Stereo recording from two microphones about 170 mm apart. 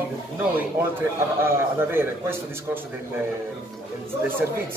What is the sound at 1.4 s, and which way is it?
Speech, 15° right (ahead or behind).